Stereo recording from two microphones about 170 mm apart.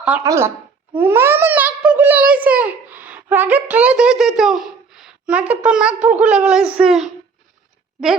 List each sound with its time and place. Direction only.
0.3 s a child's voice: 15° right (ahead or behind)